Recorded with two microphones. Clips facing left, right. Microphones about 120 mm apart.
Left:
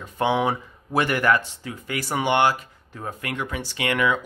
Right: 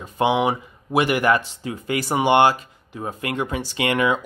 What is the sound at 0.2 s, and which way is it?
Speech, 10° right (ahead or behind).